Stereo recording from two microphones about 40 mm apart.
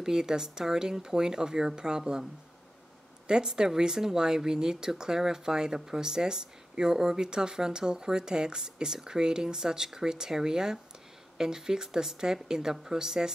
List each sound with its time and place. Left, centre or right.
0.0 s speech: centre
3.3 s speech: centre